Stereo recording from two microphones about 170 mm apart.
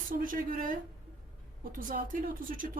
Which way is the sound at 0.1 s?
55° right (ahead or behind).